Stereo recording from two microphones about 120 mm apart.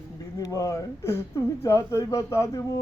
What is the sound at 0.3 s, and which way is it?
A man's voice, 30° left (ahead or behind).